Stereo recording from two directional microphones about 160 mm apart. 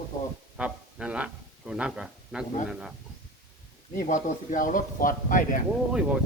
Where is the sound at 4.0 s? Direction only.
50° left (ahead or behind).